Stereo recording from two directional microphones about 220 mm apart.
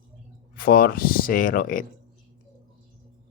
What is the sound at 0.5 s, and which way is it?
Speech, 45° left (ahead or behind).